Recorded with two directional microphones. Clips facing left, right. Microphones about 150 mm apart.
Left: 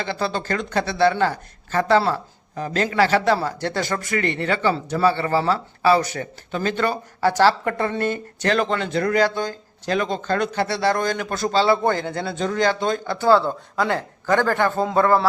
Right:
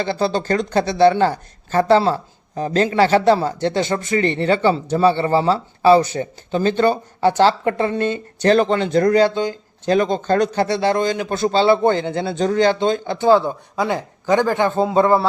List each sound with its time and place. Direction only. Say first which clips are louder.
0.0 s speech: right 5 dB; 30° right (ahead or behind)
9.2 s speech: right 4 dB; 20° right (ahead or behind)
9.9 s speech: right 6 dB; 35° right (ahead or behind)